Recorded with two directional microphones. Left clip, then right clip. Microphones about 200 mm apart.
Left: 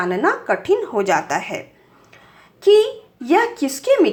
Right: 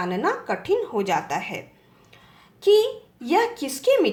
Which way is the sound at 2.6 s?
20° left (ahead or behind).